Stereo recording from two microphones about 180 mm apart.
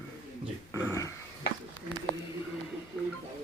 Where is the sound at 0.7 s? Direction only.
15° left (ahead or behind).